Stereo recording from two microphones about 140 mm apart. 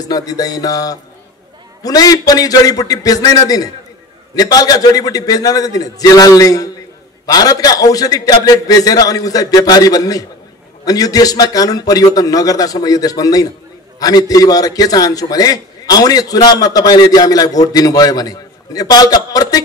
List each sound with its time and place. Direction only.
0.0 s a man's voice: 25° left (ahead or behind)